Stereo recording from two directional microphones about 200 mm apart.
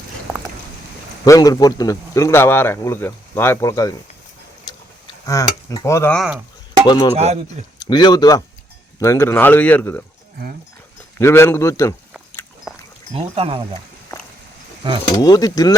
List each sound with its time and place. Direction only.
1.2 s speech: 20° left (ahead or behind)
4.6 s a sound: 20° left (ahead or behind)
6.1 s speech: 5° right (ahead or behind)
6.8 s speech: 20° left (ahead or behind)
11.2 s speech: 10° left (ahead or behind)
13.1 s speech: 30° right (ahead or behind)
15.1 s speech: 20° left (ahead or behind)